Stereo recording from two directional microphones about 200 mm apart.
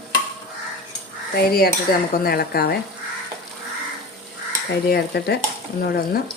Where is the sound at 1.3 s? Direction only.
50° left (ahead or behind).